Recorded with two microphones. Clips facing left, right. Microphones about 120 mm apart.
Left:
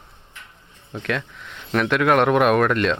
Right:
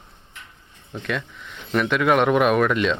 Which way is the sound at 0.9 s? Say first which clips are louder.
Left 2 dB; centre (ahead or behind).